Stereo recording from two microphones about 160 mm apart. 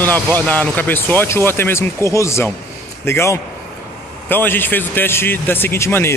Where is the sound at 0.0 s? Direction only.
10° left (ahead or behind).